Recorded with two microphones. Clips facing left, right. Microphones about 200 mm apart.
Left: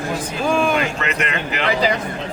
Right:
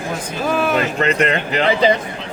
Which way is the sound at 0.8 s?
35° right (ahead or behind).